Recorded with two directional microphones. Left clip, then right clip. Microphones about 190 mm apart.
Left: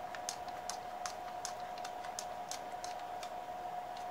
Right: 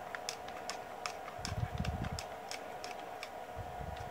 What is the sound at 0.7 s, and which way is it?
Typing, 5° right (ahead or behind).